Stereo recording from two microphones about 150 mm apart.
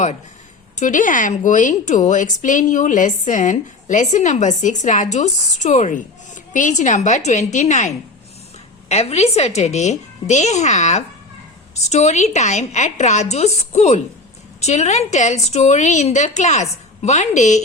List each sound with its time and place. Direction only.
0.8 s a woman's voice: 60° left (ahead or behind)